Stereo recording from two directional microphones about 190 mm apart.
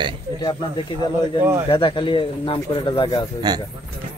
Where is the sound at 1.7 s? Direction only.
25° left (ahead or behind).